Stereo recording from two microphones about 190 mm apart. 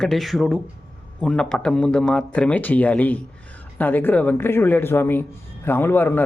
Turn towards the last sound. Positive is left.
turn(degrees=10)  # may be behind; listen again after turning